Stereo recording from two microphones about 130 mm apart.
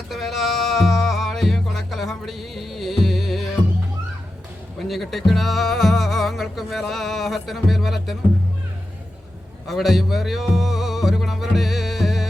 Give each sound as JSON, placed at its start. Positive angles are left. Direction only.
{"t": 0.1, "sound": "music", "side_deg": 0}
{"t": 4.8, "sound": "speech", "side_deg": 0}
{"t": 9.6, "sound": "music", "side_deg": 0}